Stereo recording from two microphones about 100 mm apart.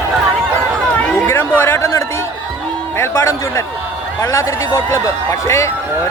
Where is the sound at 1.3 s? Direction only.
20° left (ahead or behind).